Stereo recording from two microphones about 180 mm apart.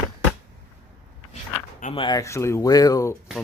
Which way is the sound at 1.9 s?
25° left (ahead or behind).